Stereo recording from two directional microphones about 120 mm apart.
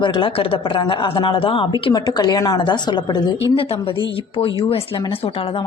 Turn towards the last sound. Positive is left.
turn(degrees=50)  # may be behind; listen again after turning